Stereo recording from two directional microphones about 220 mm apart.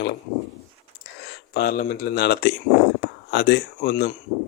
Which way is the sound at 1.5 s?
45° left (ahead or behind).